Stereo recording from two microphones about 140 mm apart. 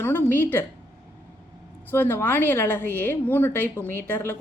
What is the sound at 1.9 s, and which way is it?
A woman's voice, 15° left (ahead or behind).